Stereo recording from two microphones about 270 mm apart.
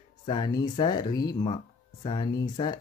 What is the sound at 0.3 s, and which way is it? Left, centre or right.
Speech, centre.